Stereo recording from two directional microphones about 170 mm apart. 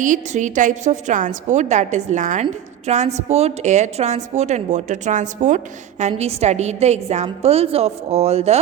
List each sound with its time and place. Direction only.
0.0 s a woman's voice: 50° right (ahead or behind)